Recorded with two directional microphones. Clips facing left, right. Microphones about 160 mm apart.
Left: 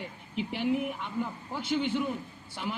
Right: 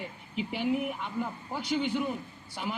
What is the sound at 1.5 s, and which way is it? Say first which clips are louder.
Speech: left 1 dB; 40° right (ahead or behind).